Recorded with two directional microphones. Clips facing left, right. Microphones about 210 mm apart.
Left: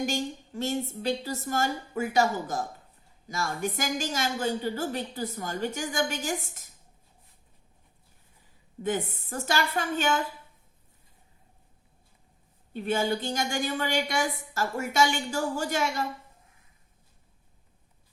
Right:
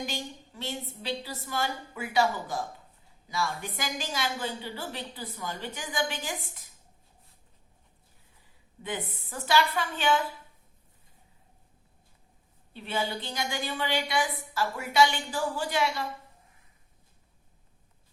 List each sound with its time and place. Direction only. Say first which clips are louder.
0.0 s a woman's voice: left 6 dB; 45° left (ahead or behind)
8.8 s a woman's voice: left 6 dB; 45° left (ahead or behind)
12.7 s a woman's voice: left 5 dB; 45° left (ahead or behind)